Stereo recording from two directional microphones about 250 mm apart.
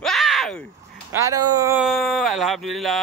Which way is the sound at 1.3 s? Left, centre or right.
Right.